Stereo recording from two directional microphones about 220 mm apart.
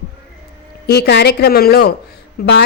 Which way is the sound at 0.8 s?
45° left (ahead or behind).